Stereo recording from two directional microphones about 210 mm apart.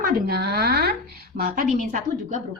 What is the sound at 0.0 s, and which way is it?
Speech, 50° right (ahead or behind).